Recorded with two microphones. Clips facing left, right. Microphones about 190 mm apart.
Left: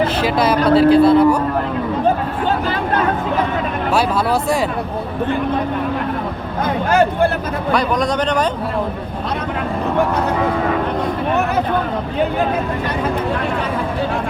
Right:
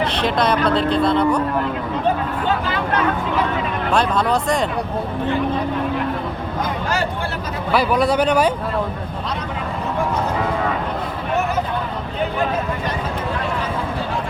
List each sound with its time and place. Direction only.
0.2 s speech: 5° left (ahead or behind)
6.9 s speech: 55° left (ahead or behind)
7.7 s speech: 5° right (ahead or behind)